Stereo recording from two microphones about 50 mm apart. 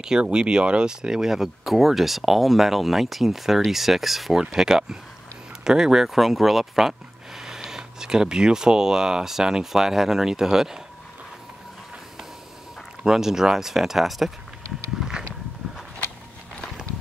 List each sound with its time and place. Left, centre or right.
0.0 s speech: centre
13.0 s speech: centre
15.0 s a sound: centre